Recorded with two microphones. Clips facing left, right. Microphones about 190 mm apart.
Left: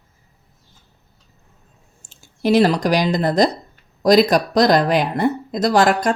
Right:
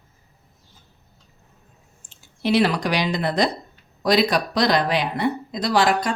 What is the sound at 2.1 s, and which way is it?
Speech, 45° left (ahead or behind).